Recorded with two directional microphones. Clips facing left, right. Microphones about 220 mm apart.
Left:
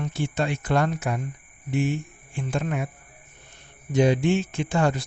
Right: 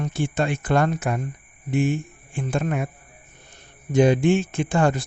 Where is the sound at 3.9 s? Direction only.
50° right (ahead or behind).